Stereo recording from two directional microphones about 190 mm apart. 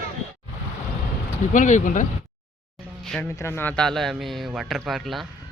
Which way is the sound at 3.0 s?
5° left (ahead or behind).